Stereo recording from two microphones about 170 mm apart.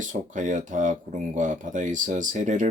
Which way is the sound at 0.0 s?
45° right (ahead or behind).